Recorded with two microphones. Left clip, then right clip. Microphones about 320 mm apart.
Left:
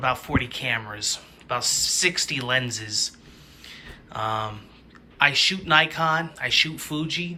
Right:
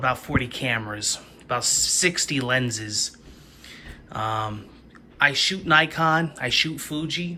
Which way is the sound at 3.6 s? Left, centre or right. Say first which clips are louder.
Left 1 dB; centre.